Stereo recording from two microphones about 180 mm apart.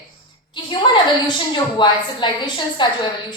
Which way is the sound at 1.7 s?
25° left (ahead or behind).